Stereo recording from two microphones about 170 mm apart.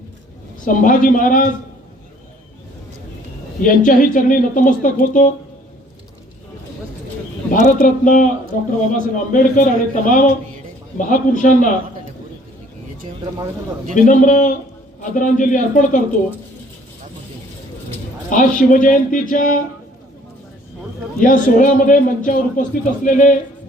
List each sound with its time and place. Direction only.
0.6 s speech: 50° left (ahead or behind)
3.6 s speech: 50° left (ahead or behind)
7.5 s speech: 55° left (ahead or behind)
13.9 s speech: 50° left (ahead or behind)
18.3 s speech: 50° left (ahead or behind)
21.2 s speech: 50° left (ahead or behind)